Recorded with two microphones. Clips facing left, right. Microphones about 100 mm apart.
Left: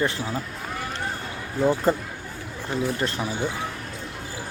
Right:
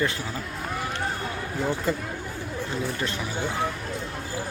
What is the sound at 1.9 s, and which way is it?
Speech, 40° left (ahead or behind).